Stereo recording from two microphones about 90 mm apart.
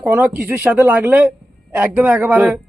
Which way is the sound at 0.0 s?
15° right (ahead or behind).